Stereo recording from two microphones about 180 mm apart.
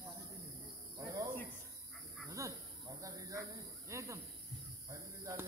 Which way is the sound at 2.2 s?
15° right (ahead or behind).